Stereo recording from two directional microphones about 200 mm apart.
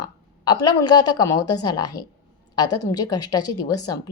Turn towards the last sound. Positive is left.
turn(degrees=20)  # may be behind; listen again after turning